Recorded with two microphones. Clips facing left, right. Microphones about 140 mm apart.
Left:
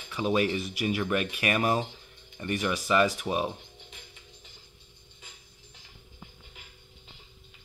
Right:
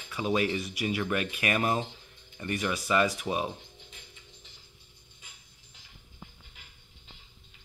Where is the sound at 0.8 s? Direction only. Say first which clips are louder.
Left 2 dB; 15° left (ahead or behind).